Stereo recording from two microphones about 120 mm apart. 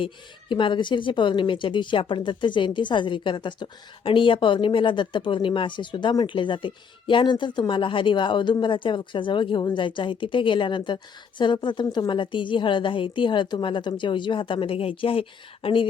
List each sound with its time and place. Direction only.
0.0 s speech: 45° left (ahead or behind)